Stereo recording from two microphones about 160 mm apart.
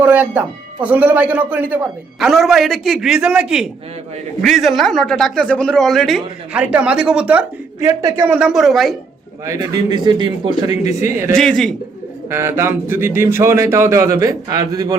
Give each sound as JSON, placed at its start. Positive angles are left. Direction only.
{"t": 0.0, "sound": "a man's voice", "side_deg": -10}
{"t": 9.5, "sound": "a man's voice", "side_deg": -25}
{"t": 10.7, "sound": "speech", "side_deg": 45}
{"t": 11.3, "sound": "a man's voice", "side_deg": 0}
{"t": 12.3, "sound": "speech", "side_deg": -15}